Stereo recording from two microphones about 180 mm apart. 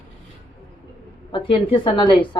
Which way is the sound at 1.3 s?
30° left (ahead or behind).